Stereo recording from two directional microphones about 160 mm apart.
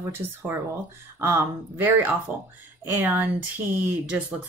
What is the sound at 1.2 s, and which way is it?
Speech, 15° right (ahead or behind).